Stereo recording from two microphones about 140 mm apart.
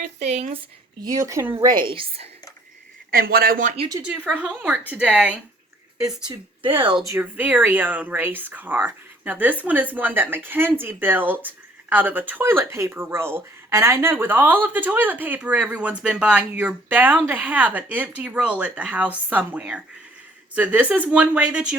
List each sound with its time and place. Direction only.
0.2 s speech: 50° right (ahead or behind)
1.0 s speech: 25° right (ahead or behind)
1.5 s a woman's voice: 35° right (ahead or behind)
3.1 s speech: 90° right
4.0 s speech: 10° right (ahead or behind)
6.2 s a woman's voice: 40° right (ahead or behind)
7.0 s speech: 20° right (ahead or behind)